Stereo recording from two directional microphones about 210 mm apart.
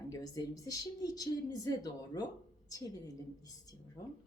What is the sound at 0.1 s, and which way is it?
Speech, 15° left (ahead or behind).